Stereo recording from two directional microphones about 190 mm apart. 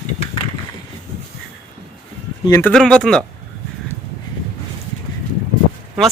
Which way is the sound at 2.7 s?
5° left (ahead or behind).